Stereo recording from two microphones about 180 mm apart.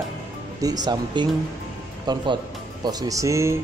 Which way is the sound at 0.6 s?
20° right (ahead or behind).